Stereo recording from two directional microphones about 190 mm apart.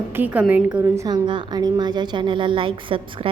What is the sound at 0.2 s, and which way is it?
A woman's voice, 10° right (ahead or behind).